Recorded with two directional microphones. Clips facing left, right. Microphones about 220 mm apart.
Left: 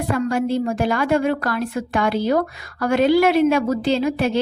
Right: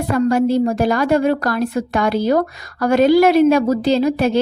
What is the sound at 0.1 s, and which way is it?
A woman's voice, 40° right (ahead or behind).